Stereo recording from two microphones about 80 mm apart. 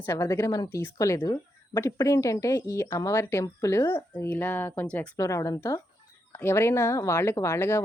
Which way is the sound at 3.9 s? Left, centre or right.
Left.